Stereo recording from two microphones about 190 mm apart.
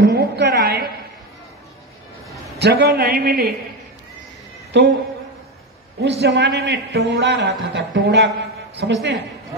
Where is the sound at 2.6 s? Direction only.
60° right (ahead or behind).